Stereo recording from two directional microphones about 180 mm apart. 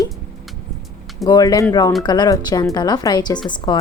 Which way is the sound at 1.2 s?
20° left (ahead or behind).